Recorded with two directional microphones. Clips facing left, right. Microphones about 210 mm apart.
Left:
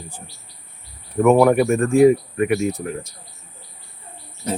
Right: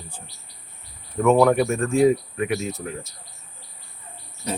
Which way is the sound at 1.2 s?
15° left (ahead or behind).